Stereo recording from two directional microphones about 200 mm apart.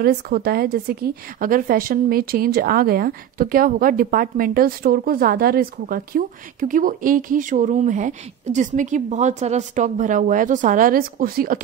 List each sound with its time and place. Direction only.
0.0 s a woman's voice: 50° right (ahead or behind)